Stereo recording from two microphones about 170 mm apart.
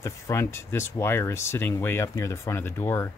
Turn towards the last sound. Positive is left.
turn(degrees=15)  # may be behind; listen again after turning